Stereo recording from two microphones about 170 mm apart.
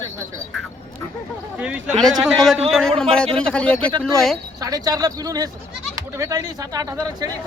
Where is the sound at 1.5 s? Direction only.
5° right (ahead or behind).